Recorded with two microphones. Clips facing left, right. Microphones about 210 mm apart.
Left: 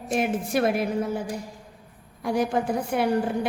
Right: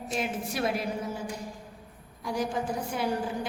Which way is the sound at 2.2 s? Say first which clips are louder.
Left 6 dB; 60° left (ahead or behind).